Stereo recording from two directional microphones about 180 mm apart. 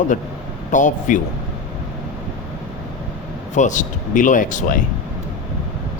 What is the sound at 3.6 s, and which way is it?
Speech, 45° left (ahead or behind).